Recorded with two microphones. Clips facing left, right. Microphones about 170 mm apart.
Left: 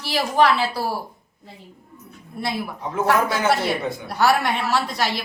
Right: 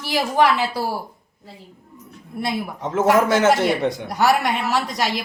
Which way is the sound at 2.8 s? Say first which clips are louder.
Right 4 dB; 90° right.